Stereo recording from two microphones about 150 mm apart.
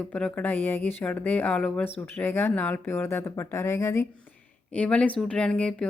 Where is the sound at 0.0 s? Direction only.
10° left (ahead or behind).